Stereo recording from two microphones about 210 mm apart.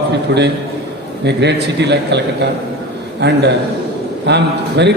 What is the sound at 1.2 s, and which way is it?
A man's voice, 55° right (ahead or behind).